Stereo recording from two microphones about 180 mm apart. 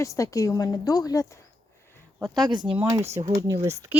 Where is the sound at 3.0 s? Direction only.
35° right (ahead or behind).